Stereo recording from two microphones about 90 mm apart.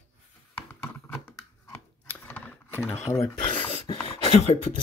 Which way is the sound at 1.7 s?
20° left (ahead or behind).